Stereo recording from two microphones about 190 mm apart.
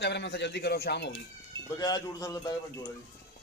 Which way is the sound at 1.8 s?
20° left (ahead or behind).